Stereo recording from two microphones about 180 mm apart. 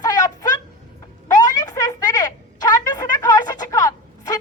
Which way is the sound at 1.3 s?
20° left (ahead or behind).